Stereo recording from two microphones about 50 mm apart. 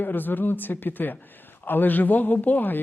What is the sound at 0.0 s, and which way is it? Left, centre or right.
A man's voice, left.